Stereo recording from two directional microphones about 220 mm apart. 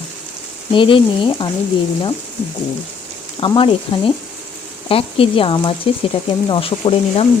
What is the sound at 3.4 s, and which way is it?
Speech, 25° left (ahead or behind).